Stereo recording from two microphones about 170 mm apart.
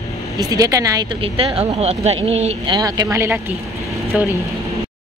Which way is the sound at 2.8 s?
20° right (ahead or behind).